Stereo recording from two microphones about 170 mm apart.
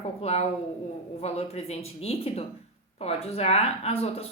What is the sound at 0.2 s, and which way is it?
A woman's voice, 35° left (ahead or behind).